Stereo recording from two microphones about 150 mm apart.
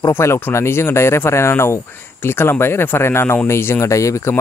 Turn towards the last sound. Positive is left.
turn(degrees=20)  # may be behind; listen again after turning